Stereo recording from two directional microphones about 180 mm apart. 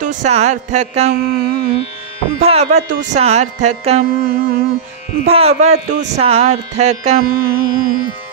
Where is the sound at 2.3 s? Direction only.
35° right (ahead or behind).